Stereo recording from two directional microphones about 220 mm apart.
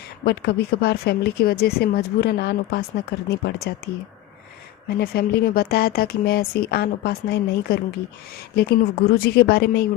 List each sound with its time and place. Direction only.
0.3 s speech: 45° left (ahead or behind)
4.9 s speech: 45° left (ahead or behind)